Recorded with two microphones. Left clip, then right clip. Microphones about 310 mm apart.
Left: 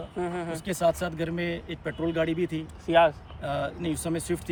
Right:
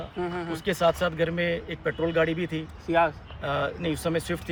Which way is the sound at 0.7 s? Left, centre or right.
Centre.